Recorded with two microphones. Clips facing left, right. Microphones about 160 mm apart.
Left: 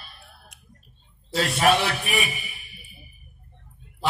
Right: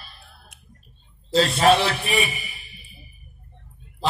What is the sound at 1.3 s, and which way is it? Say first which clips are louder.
Music: right 4 dB; 30° right (ahead or behind).